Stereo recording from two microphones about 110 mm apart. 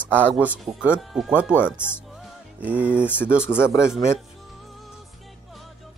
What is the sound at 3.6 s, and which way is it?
Speech, 25° left (ahead or behind).